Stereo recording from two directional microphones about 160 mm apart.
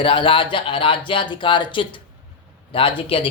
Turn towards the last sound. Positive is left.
turn(degrees=35)  # may be behind; listen again after turning